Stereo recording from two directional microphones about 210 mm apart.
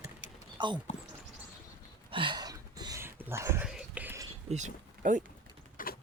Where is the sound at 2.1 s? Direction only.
20° right (ahead or behind).